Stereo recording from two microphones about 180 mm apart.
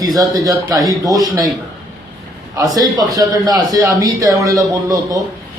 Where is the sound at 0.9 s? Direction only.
20° right (ahead or behind).